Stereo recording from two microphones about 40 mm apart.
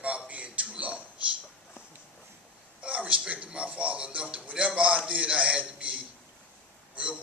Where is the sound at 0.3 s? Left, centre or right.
Right.